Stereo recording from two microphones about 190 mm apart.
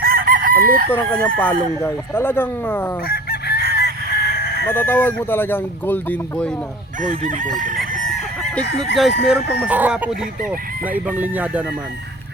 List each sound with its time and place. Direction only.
0.0 s chicken: 50° right (ahead or behind)
0.9 s speech: 10° left (ahead or behind)
3.1 s fowl: 55° left (ahead or behind)
4.4 s chicken: 55° left (ahead or behind)
4.7 s speech: 10° left (ahead or behind)
7.0 s chicken: 45° right (ahead or behind)
9.0 s chicken: 5° right (ahead or behind)
9.6 s speech: 10° right (ahead or behind)